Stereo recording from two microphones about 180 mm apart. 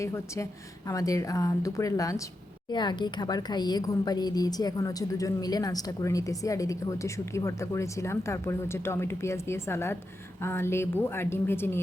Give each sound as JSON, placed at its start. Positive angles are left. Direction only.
{"t": 0.9, "sound": "a woman's voice", "side_deg": 20}